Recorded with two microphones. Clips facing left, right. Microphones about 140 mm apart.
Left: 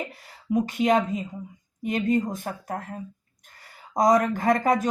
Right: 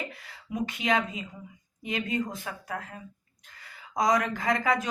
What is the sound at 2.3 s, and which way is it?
Speech, 50° left (ahead or behind).